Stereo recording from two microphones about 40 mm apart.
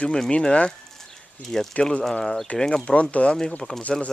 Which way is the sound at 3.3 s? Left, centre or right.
Centre.